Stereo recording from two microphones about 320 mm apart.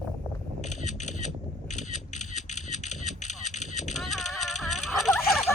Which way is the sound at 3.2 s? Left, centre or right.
Left.